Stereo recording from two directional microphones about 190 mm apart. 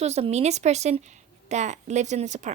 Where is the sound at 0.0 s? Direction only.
35° right (ahead or behind).